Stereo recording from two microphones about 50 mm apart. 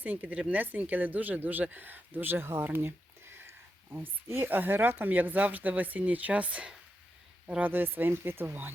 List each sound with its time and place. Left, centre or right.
0.0 s a woman's voice: right
2.7 s a sound: right
3.9 s a woman's voice: right
7.6 s speech: right